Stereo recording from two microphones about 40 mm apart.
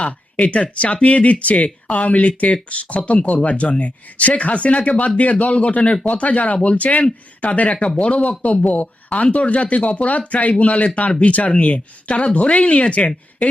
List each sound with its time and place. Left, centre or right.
0.0 s speech: left